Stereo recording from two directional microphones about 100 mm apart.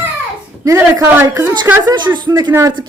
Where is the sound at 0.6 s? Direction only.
30° right (ahead or behind).